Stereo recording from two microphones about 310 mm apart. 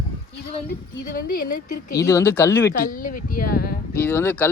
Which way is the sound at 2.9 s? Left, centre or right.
Left.